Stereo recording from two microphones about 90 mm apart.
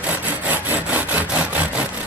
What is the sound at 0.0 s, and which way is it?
Sawing, 15° right (ahead or behind).